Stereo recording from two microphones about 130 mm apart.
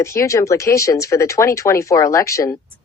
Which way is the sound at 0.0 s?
25° left (ahead or behind).